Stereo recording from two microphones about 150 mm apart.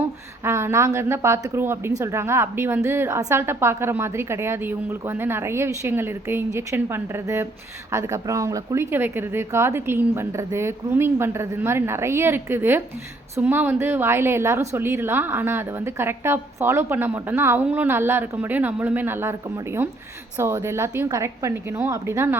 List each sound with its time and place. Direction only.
0.4 s a woman's voice: 15° right (ahead or behind)